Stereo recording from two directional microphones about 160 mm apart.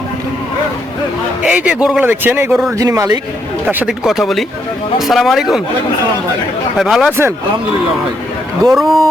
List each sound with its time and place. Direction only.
1.5 s speech: 5° right (ahead or behind); by 3.2 s 20° right (ahead or behind)
3.7 s speech: 5° right (ahead or behind)
6.7 s speech: centre (ahead or behind)
8.7 s speech: centre (ahead or behind)